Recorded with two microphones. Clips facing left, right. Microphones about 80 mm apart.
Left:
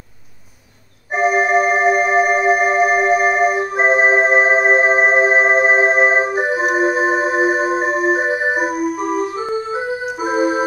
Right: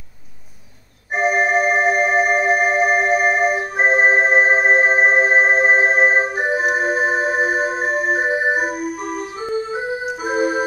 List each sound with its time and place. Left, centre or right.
1.1 s music: centre
8.8 s music: left
9.7 s music: centre